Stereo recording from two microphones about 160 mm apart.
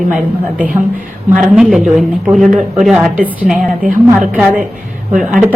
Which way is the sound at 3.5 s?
55° right (ahead or behind).